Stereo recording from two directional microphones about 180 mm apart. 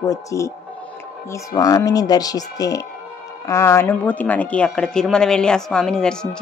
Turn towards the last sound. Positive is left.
turn(degrees=5)  # may be behind; listen again after turning